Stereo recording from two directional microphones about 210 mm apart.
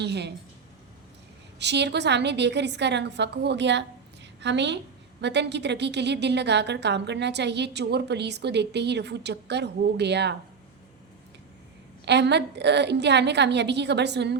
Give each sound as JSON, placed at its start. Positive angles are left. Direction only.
{"t": 0.0, "sound": "a woman's voice", "side_deg": -55}
{"t": 1.5, "sound": "a woman's voice", "side_deg": -55}
{"t": 12.0, "sound": "a woman's voice", "side_deg": -55}